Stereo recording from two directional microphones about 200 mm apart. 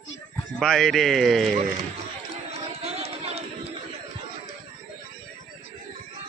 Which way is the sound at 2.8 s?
30° right (ahead or behind).